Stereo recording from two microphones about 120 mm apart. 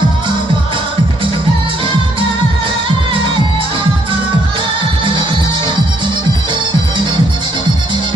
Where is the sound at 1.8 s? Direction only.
45° right (ahead or behind).